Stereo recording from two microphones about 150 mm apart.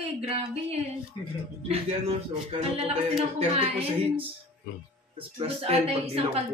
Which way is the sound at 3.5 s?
45° right (ahead or behind).